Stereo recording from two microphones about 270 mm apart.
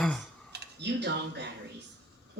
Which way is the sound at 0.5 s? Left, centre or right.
Right.